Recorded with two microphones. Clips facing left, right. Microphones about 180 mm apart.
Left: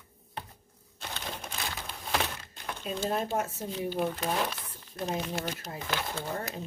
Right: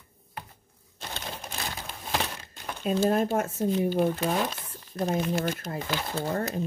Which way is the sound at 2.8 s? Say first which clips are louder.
Right 8 dB; 50° right (ahead or behind).